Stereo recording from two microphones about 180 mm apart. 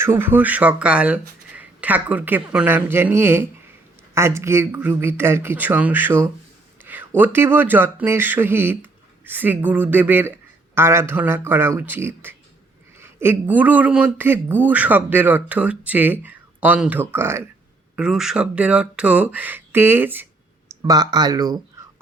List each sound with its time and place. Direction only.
0.0 s a man's voice: 10° right (ahead or behind)
6.8 s a sound: 10° right (ahead or behind)
7.2 s a man's voice: 10° right (ahead or behind)
20.8 s speech: 20° right (ahead or behind)